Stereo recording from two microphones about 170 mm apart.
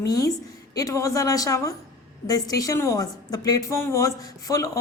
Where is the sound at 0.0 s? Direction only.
20° left (ahead or behind).